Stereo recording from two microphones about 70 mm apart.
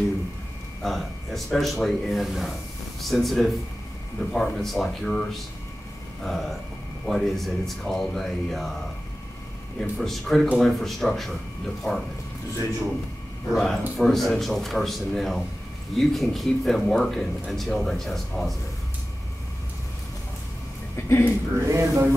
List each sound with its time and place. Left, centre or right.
0.8 s speech: centre
9.8 s speech: centre
13.6 s speech: centre
21.1 s speech: left
21.6 s speech: right